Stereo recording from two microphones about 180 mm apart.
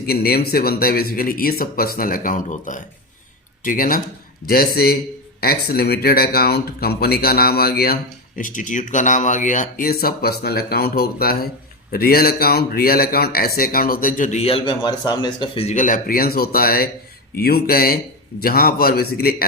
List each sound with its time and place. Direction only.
0.0 s speech: 60° left (ahead or behind)
8.4 s speech: 45° left (ahead or behind)